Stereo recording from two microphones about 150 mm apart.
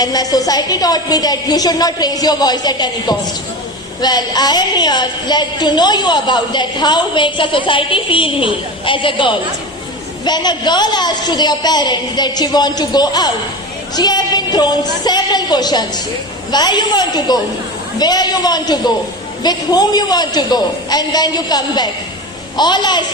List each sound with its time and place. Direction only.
0.0 s a woman's voice: 25° left (ahead or behind)